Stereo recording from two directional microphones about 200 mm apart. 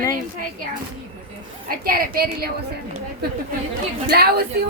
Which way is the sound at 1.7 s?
45° right (ahead or behind).